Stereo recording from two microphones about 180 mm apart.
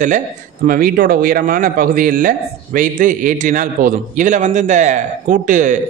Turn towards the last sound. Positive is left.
turn(degrees=-45)  # may be behind; listen again after turning